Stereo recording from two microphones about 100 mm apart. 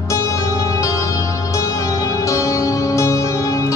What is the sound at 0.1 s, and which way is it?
Music, 30° left (ahead or behind).